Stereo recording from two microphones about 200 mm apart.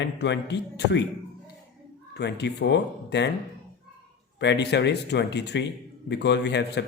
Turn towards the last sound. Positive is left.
turn(degrees=60)  # may be behind; listen again after turning